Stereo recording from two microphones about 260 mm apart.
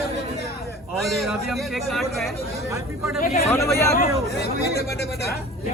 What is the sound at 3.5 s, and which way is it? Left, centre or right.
Speech, centre.